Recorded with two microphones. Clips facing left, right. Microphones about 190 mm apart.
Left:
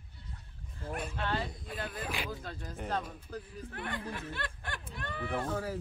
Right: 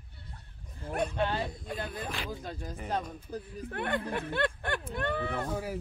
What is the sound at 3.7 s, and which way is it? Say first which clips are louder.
Speech: right 8 dB; 60° right (ahead or behind).